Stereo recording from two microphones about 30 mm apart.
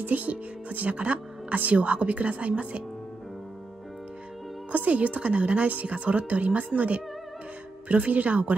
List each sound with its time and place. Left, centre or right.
0.0 s speech: right
4.7 s speech: right
5.9 s speech: right